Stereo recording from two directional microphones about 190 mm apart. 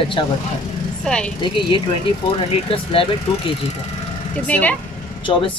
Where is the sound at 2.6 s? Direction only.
30° left (ahead or behind).